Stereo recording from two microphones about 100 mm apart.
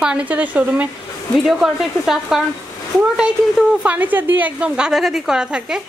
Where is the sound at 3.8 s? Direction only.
15° right (ahead or behind).